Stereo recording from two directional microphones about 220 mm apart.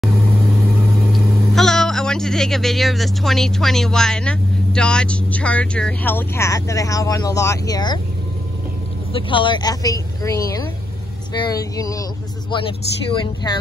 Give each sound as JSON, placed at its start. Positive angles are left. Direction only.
{"t": 1.1, "sound": "speech", "side_deg": 0}
{"t": 9.1, "sound": "speech", "side_deg": 20}